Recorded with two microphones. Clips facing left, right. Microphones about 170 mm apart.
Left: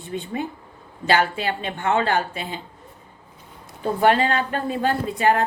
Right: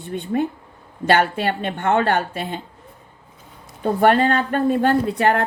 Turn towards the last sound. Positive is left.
turn(degrees=-60)  # may be behind; listen again after turning